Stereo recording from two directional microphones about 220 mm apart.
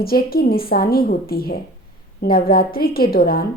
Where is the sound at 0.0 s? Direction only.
45° left (ahead or behind).